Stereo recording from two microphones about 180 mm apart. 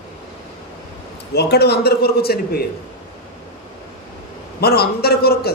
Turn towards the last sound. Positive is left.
turn(degrees=60)  # may be behind; listen again after turning